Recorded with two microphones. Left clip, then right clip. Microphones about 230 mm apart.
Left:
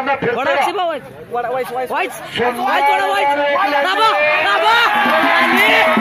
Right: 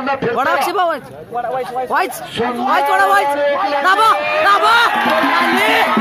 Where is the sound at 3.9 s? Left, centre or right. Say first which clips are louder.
Right 4 dB; centre.